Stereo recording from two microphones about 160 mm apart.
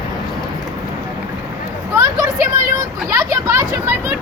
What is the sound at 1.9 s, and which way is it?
Speech, 20° right (ahead or behind).